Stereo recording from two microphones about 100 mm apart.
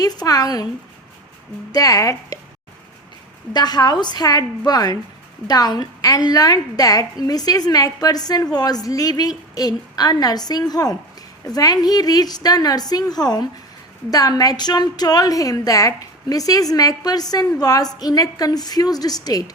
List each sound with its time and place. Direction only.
0.0 s a woman's voice: 40° left (ahead or behind)
1.7 s a woman's voice: 35° left (ahead or behind)
3.5 s a woman's voice: 45° left (ahead or behind)